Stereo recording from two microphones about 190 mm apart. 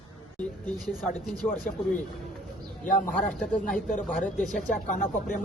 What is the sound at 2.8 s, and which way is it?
Speech, 45° left (ahead or behind).